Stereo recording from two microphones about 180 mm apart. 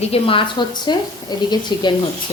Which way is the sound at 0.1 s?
30° left (ahead or behind).